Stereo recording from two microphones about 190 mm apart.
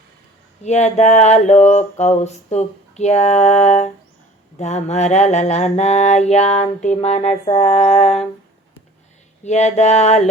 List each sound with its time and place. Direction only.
0.6 s mantra: 35° left (ahead or behind)
9.4 s mantra: 35° left (ahead or behind)